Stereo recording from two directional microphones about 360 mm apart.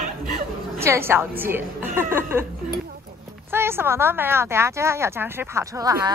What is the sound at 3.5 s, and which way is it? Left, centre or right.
Speech, centre.